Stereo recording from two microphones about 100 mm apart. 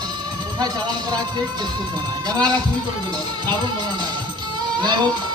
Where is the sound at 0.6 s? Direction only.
45° right (ahead or behind).